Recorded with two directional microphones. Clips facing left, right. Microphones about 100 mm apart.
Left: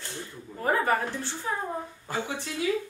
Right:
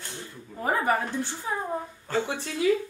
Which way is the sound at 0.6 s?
15° right (ahead or behind).